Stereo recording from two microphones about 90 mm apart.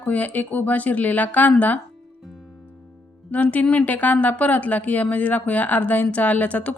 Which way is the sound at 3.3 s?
15° left (ahead or behind).